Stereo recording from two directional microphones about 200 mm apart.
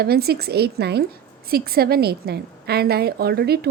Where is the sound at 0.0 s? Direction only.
50° right (ahead or behind).